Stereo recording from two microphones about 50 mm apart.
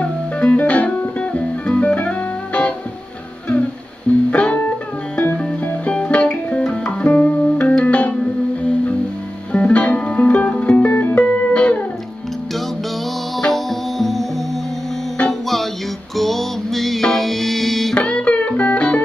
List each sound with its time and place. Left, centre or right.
0.0 s music: left
4.3 s music: left
5.9 s music: left
6.6 s guitar: left
7.2 s music: left
9.5 s music: left
10.9 s music: left
11.2 s music: left
13.5 s music: centre
16.2 s music: centre
17.9 s music: left